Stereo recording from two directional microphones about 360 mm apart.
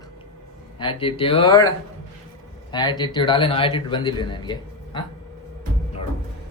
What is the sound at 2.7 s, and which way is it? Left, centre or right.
A man's voice, centre.